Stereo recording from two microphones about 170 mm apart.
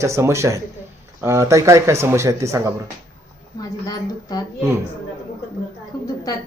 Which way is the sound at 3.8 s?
25° left (ahead or behind).